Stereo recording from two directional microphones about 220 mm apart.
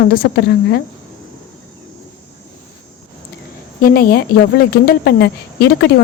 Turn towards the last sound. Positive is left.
turn(degrees=50)  # may be behind; listen again after turning